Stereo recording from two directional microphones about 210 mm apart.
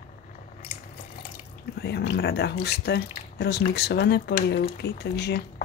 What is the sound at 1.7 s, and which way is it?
Speech, 50° left (ahead or behind).